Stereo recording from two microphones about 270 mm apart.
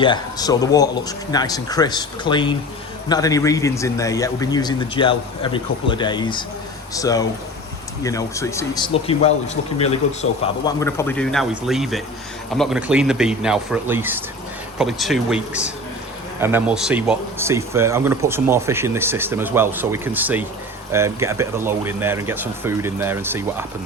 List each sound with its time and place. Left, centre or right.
0.0 s a man's voice: centre
10.7 s speech: centre